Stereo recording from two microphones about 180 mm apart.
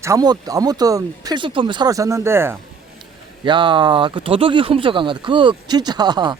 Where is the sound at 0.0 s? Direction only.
20° right (ahead or behind).